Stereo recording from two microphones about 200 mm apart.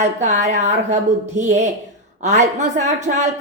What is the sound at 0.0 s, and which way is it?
Speech, 35° right (ahead or behind).